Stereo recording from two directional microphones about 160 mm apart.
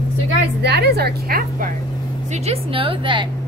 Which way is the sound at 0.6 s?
90° right.